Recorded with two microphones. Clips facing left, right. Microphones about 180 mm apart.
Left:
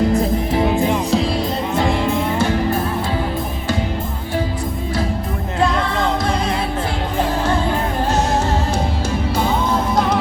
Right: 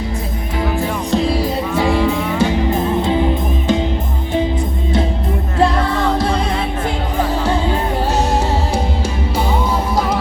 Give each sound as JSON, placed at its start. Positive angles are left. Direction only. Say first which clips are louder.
{"t": 0.1, "sound": "music", "louder": "left 7 dB", "side_deg": 30}
{"t": 1.1, "sound": "music", "louder": "right 2 dB", "side_deg": 0}
{"t": 1.9, "sound": "music", "louder": "right 3 dB", "side_deg": 15}
{"t": 2.4, "sound": "music", "louder": "right 2 dB", "side_deg": -20}